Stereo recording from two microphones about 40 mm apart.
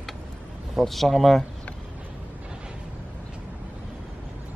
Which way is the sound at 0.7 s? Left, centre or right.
Centre.